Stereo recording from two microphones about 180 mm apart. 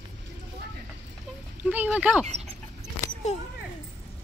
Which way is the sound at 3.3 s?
40° left (ahead or behind).